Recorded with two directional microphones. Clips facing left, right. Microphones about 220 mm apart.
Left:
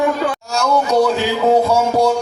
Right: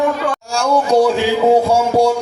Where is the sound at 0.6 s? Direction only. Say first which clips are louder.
Right 2 dB; 30° right (ahead or behind).